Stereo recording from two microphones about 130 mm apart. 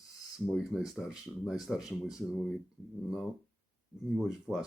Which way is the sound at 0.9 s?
5° right (ahead or behind).